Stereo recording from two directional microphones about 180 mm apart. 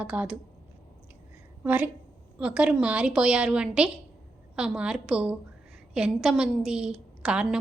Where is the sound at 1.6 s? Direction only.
10° right (ahead or behind).